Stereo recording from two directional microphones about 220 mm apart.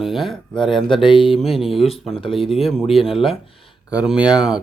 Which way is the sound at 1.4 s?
Centre (ahead or behind).